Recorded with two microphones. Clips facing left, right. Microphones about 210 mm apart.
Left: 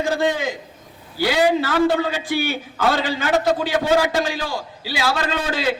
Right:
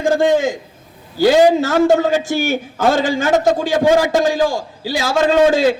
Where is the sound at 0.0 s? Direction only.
50° right (ahead or behind).